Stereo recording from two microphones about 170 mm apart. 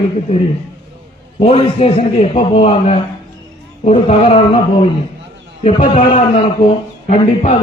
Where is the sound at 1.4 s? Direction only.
35° left (ahead or behind).